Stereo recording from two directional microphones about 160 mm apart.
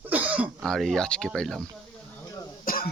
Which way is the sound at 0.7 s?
5° left (ahead or behind).